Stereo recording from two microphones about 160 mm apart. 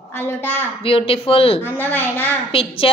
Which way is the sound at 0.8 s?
35° left (ahead or behind).